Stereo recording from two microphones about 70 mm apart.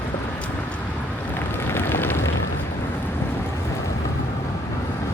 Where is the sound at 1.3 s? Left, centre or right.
Left.